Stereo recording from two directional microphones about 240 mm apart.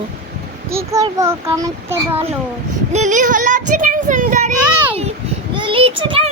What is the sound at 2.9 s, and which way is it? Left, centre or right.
Speech, right.